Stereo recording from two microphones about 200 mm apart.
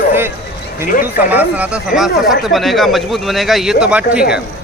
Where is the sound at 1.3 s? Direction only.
10° right (ahead or behind).